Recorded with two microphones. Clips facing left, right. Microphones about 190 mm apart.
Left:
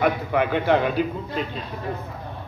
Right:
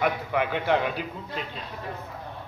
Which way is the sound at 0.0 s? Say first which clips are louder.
Left 4 dB; 45° left (ahead or behind).